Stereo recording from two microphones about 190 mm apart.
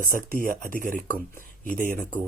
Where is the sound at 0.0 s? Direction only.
45° right (ahead or behind).